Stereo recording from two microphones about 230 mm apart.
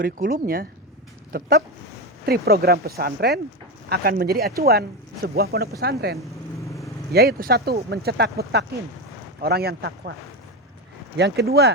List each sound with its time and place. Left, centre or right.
0.0 s speech: right
11.2 s speech: right